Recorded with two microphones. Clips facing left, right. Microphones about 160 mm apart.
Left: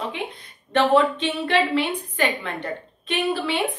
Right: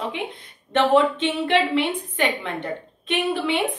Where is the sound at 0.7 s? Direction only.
20° right (ahead or behind).